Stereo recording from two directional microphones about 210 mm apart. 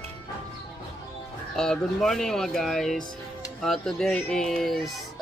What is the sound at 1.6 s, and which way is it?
Speech, centre (ahead or behind).